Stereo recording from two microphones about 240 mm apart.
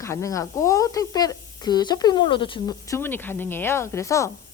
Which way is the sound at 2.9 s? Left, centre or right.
Centre.